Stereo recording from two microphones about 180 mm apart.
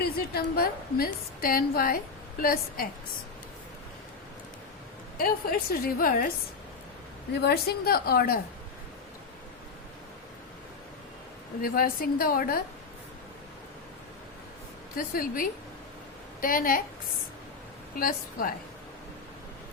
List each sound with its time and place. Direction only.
0.0 s a woman's voice: 55° left (ahead or behind)
5.1 s a woman's voice: 55° left (ahead or behind)
7.4 s a woman's voice: 60° left (ahead or behind)
11.6 s a woman's voice: 55° left (ahead or behind)
14.9 s a woman's voice: 50° left (ahead or behind)
17.9 s a woman's voice: 50° left (ahead or behind)